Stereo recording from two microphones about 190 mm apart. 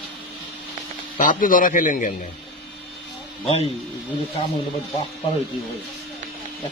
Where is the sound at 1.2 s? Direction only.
45° left (ahead or behind).